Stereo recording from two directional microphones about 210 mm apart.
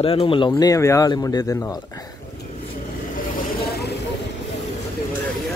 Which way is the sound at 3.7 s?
50° left (ahead or behind).